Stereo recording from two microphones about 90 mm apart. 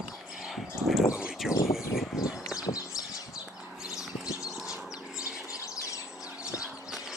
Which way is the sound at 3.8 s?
5° right (ahead or behind).